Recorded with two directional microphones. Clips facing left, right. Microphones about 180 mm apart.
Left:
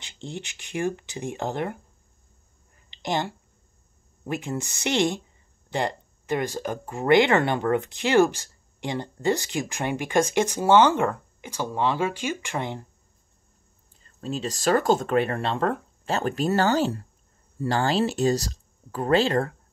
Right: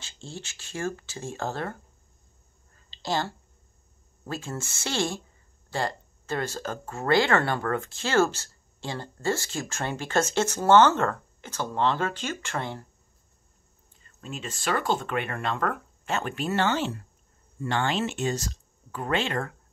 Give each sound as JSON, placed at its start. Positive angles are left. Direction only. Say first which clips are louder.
{"t": 0.0, "sound": "speech", "louder": "left 5 dB", "side_deg": 20}
{"t": 2.9, "sound": "a sound", "louder": "left 2 dB", "side_deg": 20}
{"t": 4.3, "sound": "speech", "louder": "left 5 dB", "side_deg": 15}
{"t": 14.0, "sound": "speech", "louder": "left 7 dB", "side_deg": 35}